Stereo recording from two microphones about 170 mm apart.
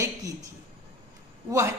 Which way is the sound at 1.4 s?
20° right (ahead or behind).